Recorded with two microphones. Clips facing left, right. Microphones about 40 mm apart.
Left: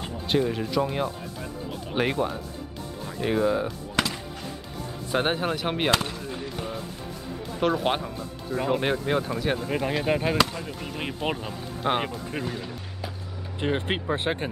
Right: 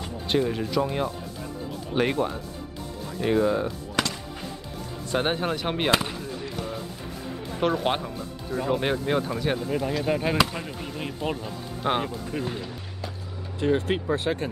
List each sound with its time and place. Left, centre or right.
0.3 s speech: centre
5.1 s speech: centre
5.9 s speech: centre
6.4 s music: centre
7.4 s speech: centre
9.7 s speech: left
10.2 s speech: centre
11.0 s speech: left
13.6 s speech: left